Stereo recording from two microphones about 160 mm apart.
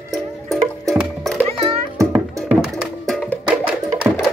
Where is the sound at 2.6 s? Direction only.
Centre (ahead or behind).